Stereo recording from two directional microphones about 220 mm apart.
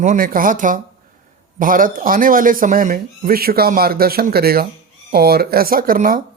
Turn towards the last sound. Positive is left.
turn(degrees=-40)  # may be behind; listen again after turning